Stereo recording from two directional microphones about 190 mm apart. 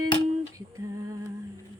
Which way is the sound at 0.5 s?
15° right (ahead or behind).